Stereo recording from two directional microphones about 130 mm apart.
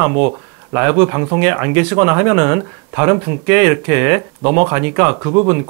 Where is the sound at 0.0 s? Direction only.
20° right (ahead or behind).